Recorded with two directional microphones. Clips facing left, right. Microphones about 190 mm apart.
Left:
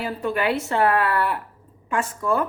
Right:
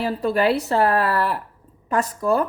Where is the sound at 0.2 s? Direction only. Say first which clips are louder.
Right 3 dB; 35° right (ahead or behind).